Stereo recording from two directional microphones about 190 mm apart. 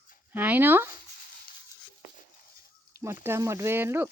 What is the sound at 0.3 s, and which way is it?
Speech, 10° right (ahead or behind).